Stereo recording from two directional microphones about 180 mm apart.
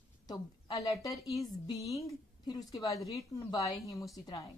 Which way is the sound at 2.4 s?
20° left (ahead or behind).